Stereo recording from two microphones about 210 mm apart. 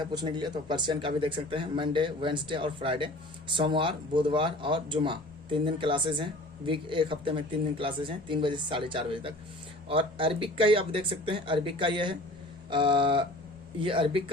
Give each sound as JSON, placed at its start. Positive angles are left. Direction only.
{"t": 0.0, "sound": "speech", "side_deg": -20}